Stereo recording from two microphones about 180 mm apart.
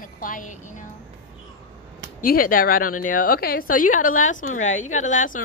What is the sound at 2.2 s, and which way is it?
A woman's voice, 50° left (ahead or behind).